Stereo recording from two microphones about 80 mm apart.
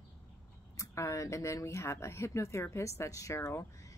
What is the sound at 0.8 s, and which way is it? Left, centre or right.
Speech, left.